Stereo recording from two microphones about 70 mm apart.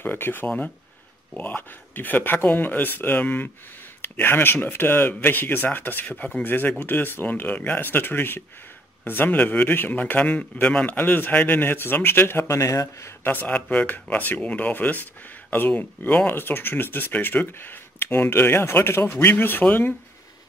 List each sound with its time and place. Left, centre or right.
0.0 s speech: left
13.2 s speech: left